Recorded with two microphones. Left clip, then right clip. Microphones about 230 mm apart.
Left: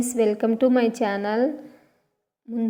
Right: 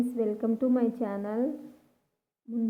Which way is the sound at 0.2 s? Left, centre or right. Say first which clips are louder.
Left 11 dB; left.